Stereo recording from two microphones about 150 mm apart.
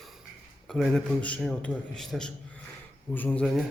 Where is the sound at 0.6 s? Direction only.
5° left (ahead or behind).